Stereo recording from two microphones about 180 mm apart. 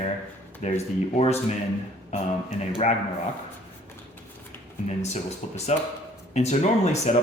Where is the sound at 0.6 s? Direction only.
35° left (ahead or behind).